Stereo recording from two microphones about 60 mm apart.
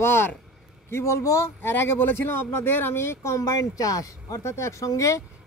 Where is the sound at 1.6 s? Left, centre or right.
Left.